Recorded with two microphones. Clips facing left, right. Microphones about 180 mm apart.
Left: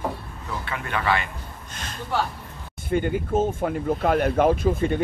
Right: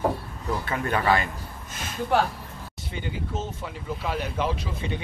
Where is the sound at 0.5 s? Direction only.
40° right (ahead or behind).